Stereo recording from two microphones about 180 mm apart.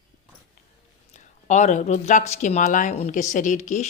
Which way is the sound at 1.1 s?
40° left (ahead or behind).